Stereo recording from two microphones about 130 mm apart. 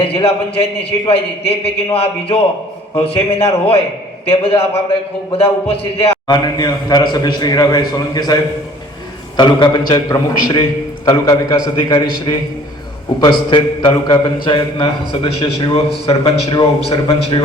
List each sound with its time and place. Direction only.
0.0 s a man's voice: 45° left (ahead or behind)
6.3 s a man's voice: 35° left (ahead or behind)
9.4 s a man's voice: 35° left (ahead or behind)